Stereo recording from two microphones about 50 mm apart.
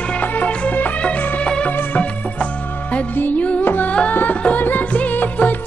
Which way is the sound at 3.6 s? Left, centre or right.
Left.